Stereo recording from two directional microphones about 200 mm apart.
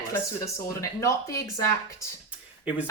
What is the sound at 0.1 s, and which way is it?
Speech, 15° left (ahead or behind).